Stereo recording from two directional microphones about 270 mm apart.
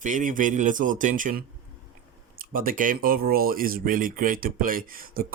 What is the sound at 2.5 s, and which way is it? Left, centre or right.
Speech, right.